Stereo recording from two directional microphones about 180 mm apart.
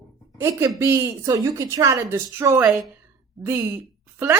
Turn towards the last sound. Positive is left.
turn(degrees=-10)  # may be behind; listen again after turning